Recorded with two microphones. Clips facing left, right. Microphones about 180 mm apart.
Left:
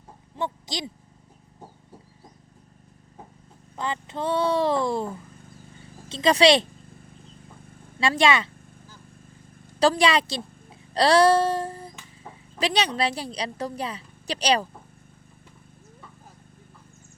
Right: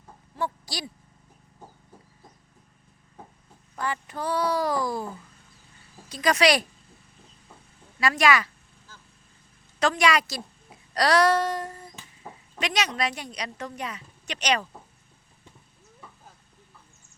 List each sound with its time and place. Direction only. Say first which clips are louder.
0.3 s owl: left 1 dB; 20° left (ahead or behind)
3.8 s speech: left 1 dB; 20° left (ahead or behind)
7.9 s speech: left 1 dB; 25° left (ahead or behind)
9.8 s a woman's voice: left 3 dB; 30° left (ahead or behind)